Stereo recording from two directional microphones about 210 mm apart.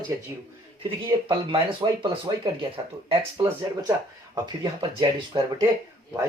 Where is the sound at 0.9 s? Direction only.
25° right (ahead or behind).